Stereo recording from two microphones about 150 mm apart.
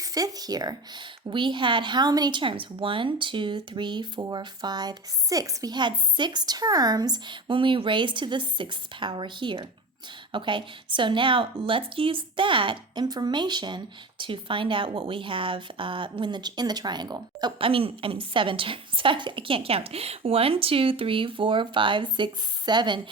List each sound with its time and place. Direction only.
0.0 s a woman's voice: 25° right (ahead or behind)